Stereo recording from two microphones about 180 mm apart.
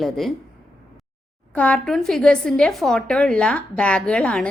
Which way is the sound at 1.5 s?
5° left (ahead or behind).